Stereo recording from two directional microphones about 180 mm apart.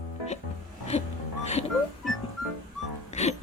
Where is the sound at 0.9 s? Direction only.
35° left (ahead or behind).